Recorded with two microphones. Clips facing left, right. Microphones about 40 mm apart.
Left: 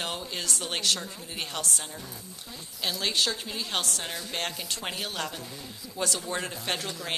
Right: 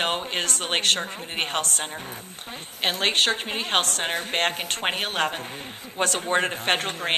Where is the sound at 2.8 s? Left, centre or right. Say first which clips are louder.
Right 6 dB; right.